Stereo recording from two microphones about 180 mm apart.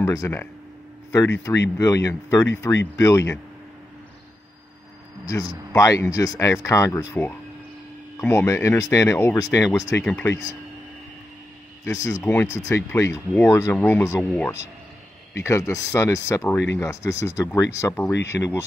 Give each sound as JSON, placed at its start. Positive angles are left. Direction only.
{"t": 0.0, "sound": "speech", "side_deg": 15}
{"t": 1.8, "sound": "speech", "side_deg": 15}
{"t": 5.2, "sound": "speech", "side_deg": 20}
{"t": 11.8, "sound": "speech", "side_deg": 15}